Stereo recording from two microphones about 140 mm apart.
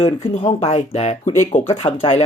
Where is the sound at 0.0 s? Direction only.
40° left (ahead or behind).